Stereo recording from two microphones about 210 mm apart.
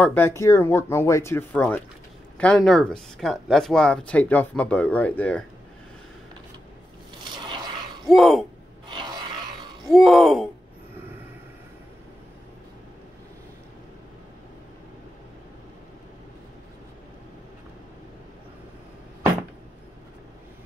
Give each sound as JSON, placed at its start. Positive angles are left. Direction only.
{"t": 0.0, "sound": "speech", "side_deg": 10}
{"t": 7.2, "sound": "scrape", "side_deg": -20}
{"t": 8.1, "sound": "speech", "side_deg": 0}
{"t": 8.8, "sound": "a sound", "side_deg": -20}
{"t": 9.9, "sound": "speech", "side_deg": 0}